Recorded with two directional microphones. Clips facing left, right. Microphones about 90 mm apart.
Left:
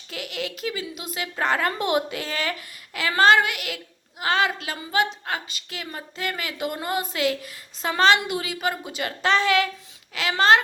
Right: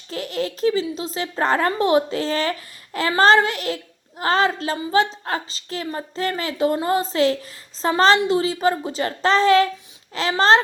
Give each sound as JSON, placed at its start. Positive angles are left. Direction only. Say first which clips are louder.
{"t": 0.1, "sound": "speech", "louder": "right 6 dB", "side_deg": -35}